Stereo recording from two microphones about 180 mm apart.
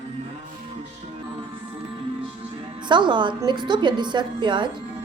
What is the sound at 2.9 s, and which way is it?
A woman's voice, 25° right (ahead or behind).